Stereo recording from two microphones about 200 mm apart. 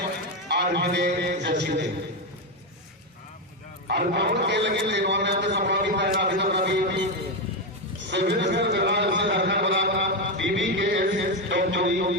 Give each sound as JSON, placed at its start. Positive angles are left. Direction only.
{"t": 0.4, "sound": "a man's voice", "side_deg": -55}
{"t": 3.8, "sound": "a man's voice", "side_deg": -55}
{"t": 8.1, "sound": "a sound", "side_deg": -60}